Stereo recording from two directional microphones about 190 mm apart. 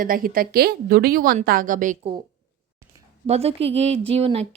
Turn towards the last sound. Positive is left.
turn(degrees=-30)  # may be behind; listen again after turning